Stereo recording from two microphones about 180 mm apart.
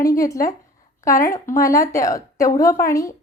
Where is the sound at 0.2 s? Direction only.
20° left (ahead or behind).